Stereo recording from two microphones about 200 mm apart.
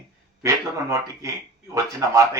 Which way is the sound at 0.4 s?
15° right (ahead or behind).